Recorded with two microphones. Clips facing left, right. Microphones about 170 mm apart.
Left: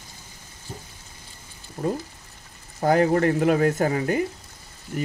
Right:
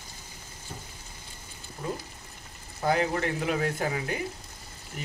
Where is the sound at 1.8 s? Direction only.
40° left (ahead or behind).